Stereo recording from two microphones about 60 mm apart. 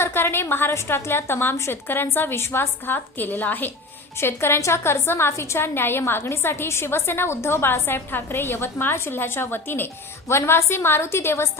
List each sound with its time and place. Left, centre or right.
0.0 s a woman's voice: left
4.2 s a woman's voice: left